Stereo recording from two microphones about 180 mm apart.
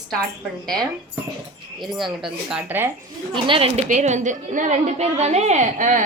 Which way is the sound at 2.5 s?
10° right (ahead or behind).